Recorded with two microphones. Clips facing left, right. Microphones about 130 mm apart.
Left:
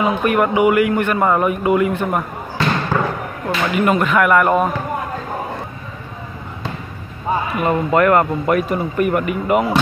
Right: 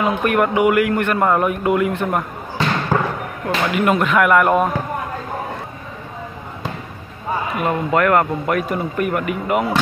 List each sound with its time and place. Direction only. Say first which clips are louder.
0.0 s a man's voice: left 1 dB; centre (ahead or behind)
2.9 s basketball bounce: right 2 dB; 30° right (ahead or behind)
3.4 s a man's voice: left 1 dB; centre (ahead or behind)
7.6 s a man's voice: left 3 dB; centre (ahead or behind)